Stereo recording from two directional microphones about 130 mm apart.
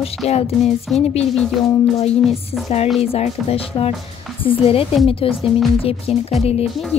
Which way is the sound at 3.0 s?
50° left (ahead or behind).